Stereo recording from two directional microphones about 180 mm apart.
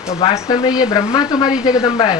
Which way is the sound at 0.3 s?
20° left (ahead or behind).